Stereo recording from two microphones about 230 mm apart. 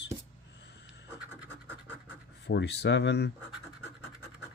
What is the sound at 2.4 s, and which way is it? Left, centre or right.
Speech, left.